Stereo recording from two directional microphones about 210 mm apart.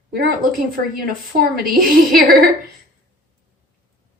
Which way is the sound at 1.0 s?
40° right (ahead or behind).